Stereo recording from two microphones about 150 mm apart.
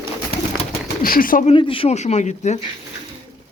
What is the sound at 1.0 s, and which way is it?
Speech, 70° left (ahead or behind).